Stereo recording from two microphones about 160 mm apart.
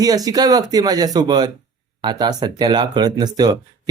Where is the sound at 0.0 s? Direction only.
25° right (ahead or behind).